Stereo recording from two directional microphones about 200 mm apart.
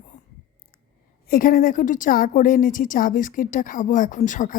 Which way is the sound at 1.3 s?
45° left (ahead or behind).